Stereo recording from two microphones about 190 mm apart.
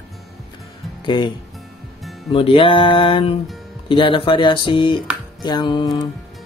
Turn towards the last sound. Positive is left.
turn(degrees=20)  # may be behind; listen again after turning